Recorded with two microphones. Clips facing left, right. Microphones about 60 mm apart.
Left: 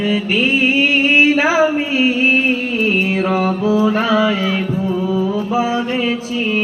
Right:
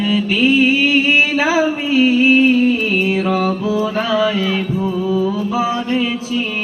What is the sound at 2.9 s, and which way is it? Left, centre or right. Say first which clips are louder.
Mantra: even; centre.